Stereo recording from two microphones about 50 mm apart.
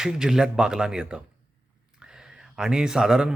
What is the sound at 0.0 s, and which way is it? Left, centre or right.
A man's voice, centre.